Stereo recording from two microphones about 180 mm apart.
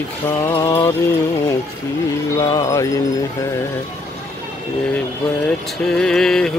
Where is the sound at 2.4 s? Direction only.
20° left (ahead or behind).